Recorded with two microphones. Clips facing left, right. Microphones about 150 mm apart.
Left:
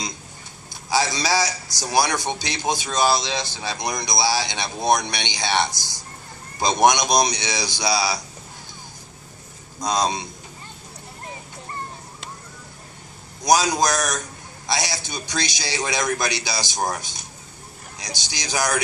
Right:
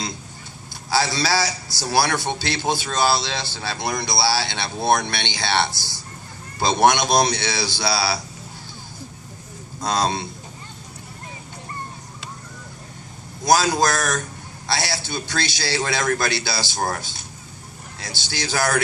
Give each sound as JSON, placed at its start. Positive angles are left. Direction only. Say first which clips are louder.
{"t": 0.9, "sound": "a man's voice", "louder": "even", "side_deg": 15}
{"t": 9.8, "sound": "a man's voice", "louder": "even", "side_deg": 20}
{"t": 13.4, "sound": "a man's voice", "louder": "right 1 dB", "side_deg": 20}
{"t": 18.0, "sound": "a man's voice", "louder": "right 4 dB", "side_deg": 15}